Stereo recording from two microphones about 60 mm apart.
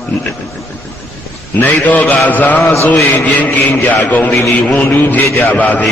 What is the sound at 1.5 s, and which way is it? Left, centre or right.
A man's voice, left.